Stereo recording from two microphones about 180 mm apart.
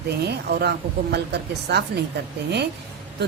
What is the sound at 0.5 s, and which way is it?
Speech, 65° right (ahead or behind).